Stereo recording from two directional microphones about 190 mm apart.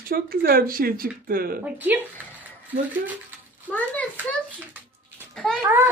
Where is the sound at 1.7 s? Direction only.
10° right (ahead or behind).